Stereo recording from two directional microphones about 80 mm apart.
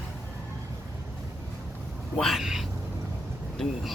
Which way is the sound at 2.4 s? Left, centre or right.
Centre.